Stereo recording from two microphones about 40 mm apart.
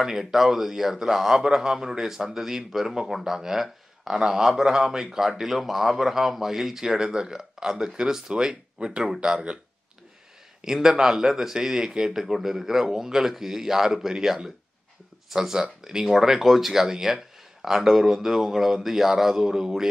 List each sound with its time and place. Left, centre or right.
0.0 s speech: centre; by 9.6 s right
10.6 s speech: centre